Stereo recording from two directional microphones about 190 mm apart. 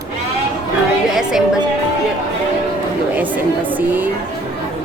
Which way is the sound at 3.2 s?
10° right (ahead or behind).